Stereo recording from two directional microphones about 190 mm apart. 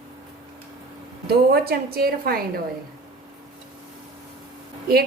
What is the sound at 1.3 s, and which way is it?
A woman's voice, 55° right (ahead or behind).